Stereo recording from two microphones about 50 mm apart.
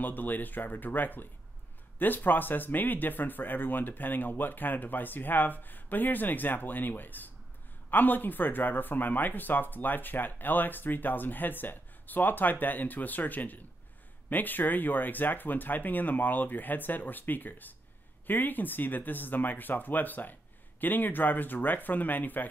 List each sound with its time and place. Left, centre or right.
0.0 s speech: left